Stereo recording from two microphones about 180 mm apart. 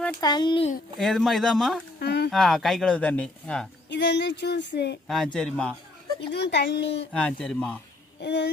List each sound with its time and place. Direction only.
0.2 s speech: 25° left (ahead or behind)
0.9 s speech: centre (ahead or behind)
2.0 s a sound: 65° left (ahead or behind)
2.3 s speech: centre (ahead or behind)
3.8 s speech: 70° left (ahead or behind)
5.0 s speech: centre (ahead or behind)
6.3 s speech: 70° left (ahead or behind)
7.1 s speech: 5° left (ahead or behind)
8.2 s speech: 70° left (ahead or behind)